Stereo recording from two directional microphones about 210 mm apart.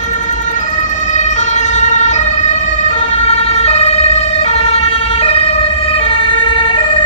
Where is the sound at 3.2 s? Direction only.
30° left (ahead or behind).